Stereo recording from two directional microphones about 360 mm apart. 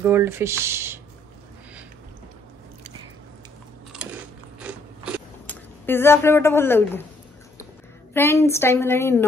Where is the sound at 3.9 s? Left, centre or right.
Centre.